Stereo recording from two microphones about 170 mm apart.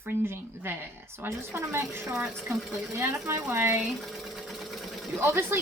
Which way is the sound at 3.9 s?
Centre (ahead or behind).